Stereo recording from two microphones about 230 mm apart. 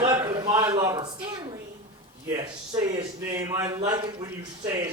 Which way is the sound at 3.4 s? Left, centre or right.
Centre.